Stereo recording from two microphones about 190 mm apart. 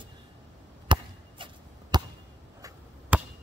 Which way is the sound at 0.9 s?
25° right (ahead or behind).